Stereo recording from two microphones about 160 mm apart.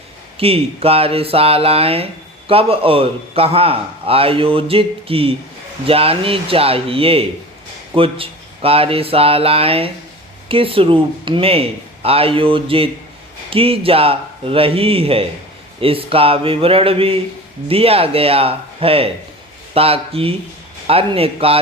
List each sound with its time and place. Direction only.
0.3 s a man's voice: 35° right (ahead or behind)